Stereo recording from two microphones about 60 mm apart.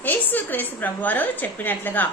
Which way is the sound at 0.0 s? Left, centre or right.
Left.